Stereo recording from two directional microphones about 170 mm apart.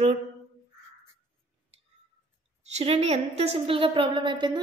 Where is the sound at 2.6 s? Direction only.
40° right (ahead or behind).